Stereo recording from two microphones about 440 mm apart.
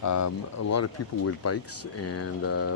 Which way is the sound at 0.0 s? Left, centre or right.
Left.